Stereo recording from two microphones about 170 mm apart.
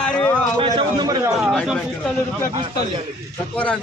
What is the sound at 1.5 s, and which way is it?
Speech, centre (ahead or behind).